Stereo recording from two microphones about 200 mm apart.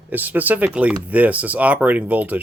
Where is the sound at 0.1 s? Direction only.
10° right (ahead or behind).